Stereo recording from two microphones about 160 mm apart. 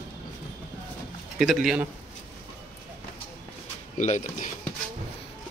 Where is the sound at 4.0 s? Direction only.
50° left (ahead or behind).